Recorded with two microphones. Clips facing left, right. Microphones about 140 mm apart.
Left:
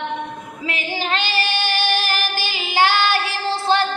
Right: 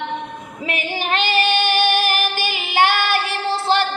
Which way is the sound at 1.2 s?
55° right (ahead or behind).